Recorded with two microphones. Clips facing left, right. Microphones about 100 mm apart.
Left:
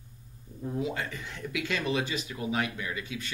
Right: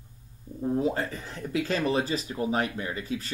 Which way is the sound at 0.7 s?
35° right (ahead or behind).